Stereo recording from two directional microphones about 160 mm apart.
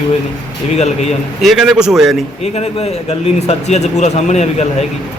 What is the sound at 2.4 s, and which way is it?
A man's voice, 40° left (ahead or behind).